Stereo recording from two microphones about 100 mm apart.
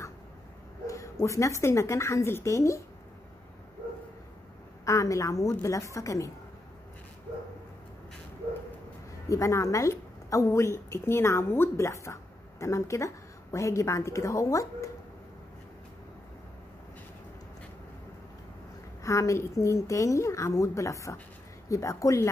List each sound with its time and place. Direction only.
0.8 s a sound: 30° left (ahead or behind)
1.2 s a woman's voice: 30° left (ahead or behind)
4.8 s a woman's voice: 30° left (ahead or behind)
9.3 s a woman's voice: 30° left (ahead or behind)
19.0 s a woman's voice: 30° left (ahead or behind)